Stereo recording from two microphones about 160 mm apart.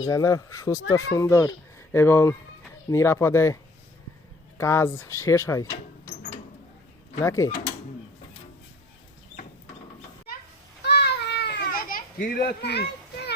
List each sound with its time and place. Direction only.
0.1 s speech: 20° left (ahead or behind)
7.2 s speech: 20° left (ahead or behind)
10.8 s children playing: 90° left